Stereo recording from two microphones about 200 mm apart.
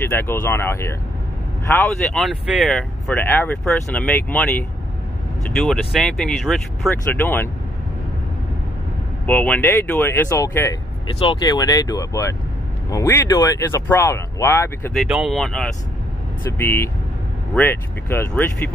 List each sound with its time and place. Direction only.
0.0 s speech: 10° left (ahead or behind)
9.2 s speech: 5° left (ahead or behind)
11.1 s speech: 25° left (ahead or behind)
15.0 s speech: centre (ahead or behind)